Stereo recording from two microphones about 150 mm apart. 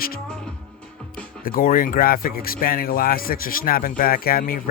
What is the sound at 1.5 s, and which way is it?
Speech, 70° left (ahead or behind).